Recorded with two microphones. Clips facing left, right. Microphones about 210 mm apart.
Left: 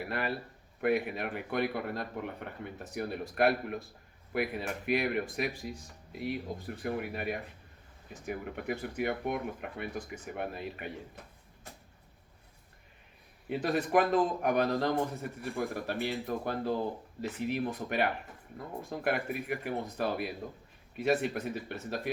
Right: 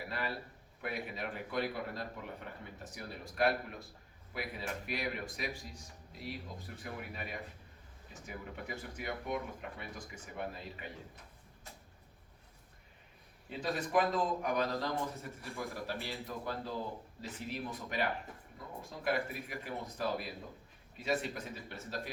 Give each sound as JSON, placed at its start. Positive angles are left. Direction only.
{"t": 0.0, "sound": "a man's voice", "side_deg": 60}
{"t": 13.5, "sound": "a man's voice", "side_deg": 60}